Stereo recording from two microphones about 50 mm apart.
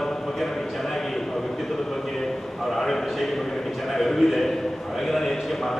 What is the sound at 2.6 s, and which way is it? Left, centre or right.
A man's voice, centre.